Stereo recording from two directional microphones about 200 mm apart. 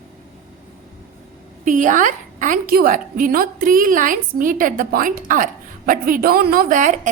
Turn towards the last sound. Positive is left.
turn(degrees=-40)  # may be behind; listen again after turning